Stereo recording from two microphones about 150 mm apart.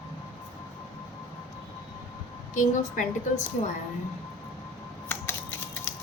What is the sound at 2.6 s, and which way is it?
Speech, 60° left (ahead or behind).